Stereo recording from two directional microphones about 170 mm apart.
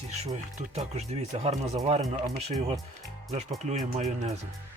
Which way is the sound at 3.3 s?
40° right (ahead or behind).